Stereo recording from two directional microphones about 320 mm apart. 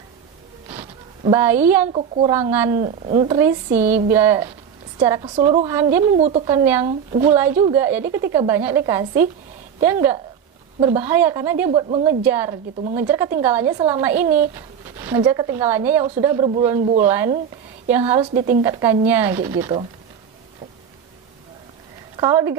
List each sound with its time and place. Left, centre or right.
0.7 s a sound: centre
1.9 s speech: centre
2.3 s speech: centre
5.8 s speech: centre
6.1 s speech: centre
22.1 s speech: centre